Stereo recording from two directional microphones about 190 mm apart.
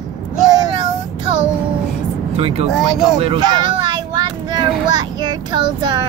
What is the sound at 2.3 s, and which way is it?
Speech, 30° right (ahead or behind).